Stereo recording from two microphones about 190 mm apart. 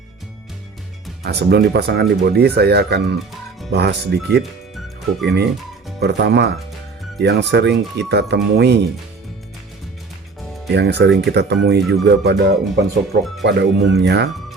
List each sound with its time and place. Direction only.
1.2 s speech: 60° right (ahead or behind)
10.7 s speech: 60° right (ahead or behind)
13.4 s speech: 65° right (ahead or behind)